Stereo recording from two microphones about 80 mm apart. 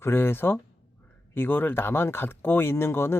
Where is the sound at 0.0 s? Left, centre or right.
Left.